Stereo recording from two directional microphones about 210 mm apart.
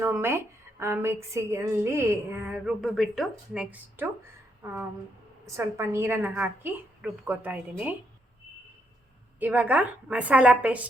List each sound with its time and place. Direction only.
0.0 s a woman's voice: 10° right (ahead or behind)
9.4 s a woman's voice: 10° right (ahead or behind)